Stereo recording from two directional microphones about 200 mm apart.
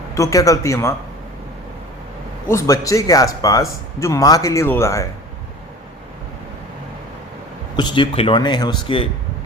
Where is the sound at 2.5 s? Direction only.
15° left (ahead or behind).